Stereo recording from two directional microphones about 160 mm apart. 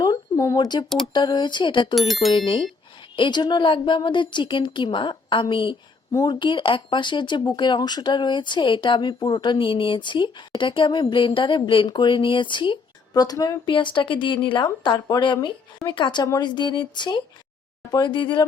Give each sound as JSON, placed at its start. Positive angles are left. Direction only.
{"t": 0.0, "sound": "a sound", "side_deg": 25}
{"t": 1.1, "sound": "a woman's voice", "side_deg": 25}
{"t": 2.0, "sound": "speech", "side_deg": 0}
{"t": 3.2, "sound": "a woman's voice", "side_deg": 30}